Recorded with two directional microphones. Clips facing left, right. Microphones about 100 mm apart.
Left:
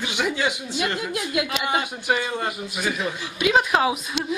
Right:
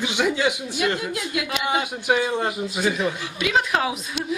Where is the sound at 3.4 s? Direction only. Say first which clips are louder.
Left 3 dB; 20° left (ahead or behind).